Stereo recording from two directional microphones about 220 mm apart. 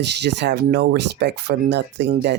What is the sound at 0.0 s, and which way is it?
Speech, 50° right (ahead or behind).